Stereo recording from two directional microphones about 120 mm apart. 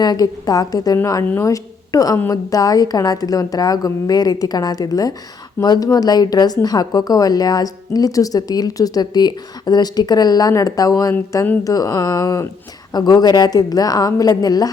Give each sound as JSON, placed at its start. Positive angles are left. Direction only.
{"t": 0.0, "sound": "a woman's voice", "side_deg": 35}